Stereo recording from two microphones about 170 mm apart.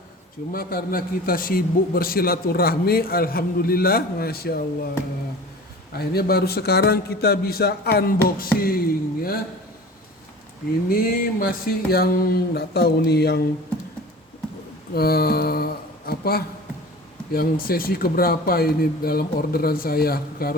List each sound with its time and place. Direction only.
0.5 s a man's voice: 60° left (ahead or behind)
5.9 s a man's voice: 65° left (ahead or behind)
10.8 s a man's voice: 60° left (ahead or behind)
14.9 s a man's voice: 65° left (ahead or behind)